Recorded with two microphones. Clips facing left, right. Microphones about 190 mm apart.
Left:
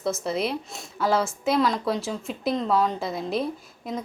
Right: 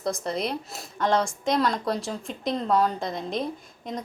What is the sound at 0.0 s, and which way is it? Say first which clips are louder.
A woman's voice: left 2 dB; 5° left (ahead or behind).